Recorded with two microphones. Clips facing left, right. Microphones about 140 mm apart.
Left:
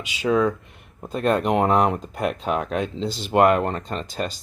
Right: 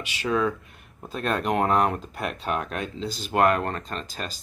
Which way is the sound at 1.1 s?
20° left (ahead or behind).